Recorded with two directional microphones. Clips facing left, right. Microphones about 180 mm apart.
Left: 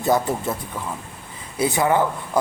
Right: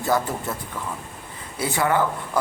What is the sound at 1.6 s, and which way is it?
Speech, 15° left (ahead or behind).